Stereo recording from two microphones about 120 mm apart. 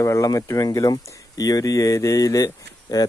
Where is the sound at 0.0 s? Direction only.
25° left (ahead or behind).